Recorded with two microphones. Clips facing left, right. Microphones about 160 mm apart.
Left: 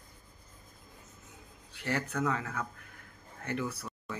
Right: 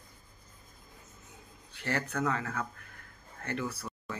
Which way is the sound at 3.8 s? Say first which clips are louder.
Right 1 dB; centre (ahead or behind).